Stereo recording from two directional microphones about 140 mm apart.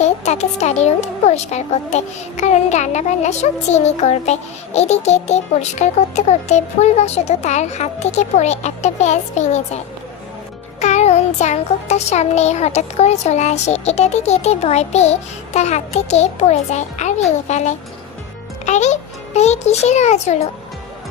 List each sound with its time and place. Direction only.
0.0 s a woman's voice: 55° left (ahead or behind)